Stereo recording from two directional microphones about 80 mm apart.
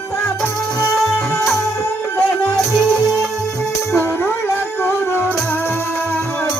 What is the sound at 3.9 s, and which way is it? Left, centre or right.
Music, left.